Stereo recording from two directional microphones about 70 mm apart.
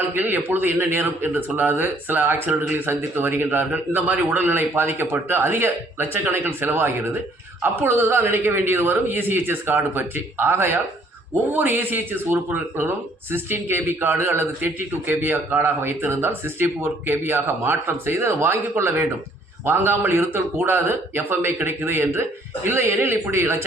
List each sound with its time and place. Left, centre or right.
0.1 s a man's voice: right